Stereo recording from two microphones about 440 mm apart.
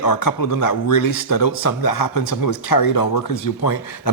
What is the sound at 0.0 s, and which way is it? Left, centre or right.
Speech, left.